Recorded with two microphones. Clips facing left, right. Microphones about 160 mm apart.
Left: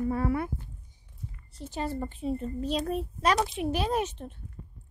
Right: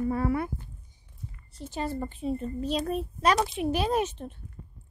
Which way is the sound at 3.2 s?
10° right (ahead or behind).